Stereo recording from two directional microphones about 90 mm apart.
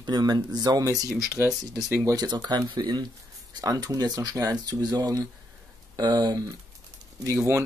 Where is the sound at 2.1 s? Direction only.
45° right (ahead or behind).